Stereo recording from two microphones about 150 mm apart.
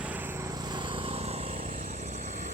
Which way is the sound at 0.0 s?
10° right (ahead or behind).